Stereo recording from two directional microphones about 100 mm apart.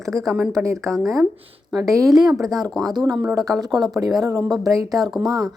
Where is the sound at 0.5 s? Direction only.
30° right (ahead or behind).